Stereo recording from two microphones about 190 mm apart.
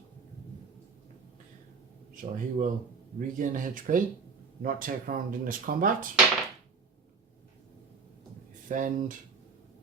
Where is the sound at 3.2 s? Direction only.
45° right (ahead or behind).